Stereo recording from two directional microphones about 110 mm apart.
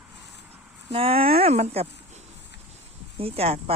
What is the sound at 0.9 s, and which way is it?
Speech, 60° right (ahead or behind).